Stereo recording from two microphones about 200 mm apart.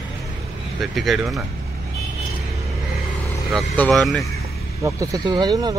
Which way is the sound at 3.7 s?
5° left (ahead or behind).